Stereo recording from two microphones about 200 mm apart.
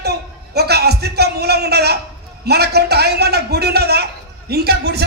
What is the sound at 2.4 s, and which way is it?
A man's voice, 55° right (ahead or behind).